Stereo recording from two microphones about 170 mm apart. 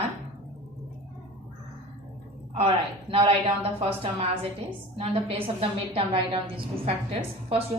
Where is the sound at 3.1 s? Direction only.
30° right (ahead or behind).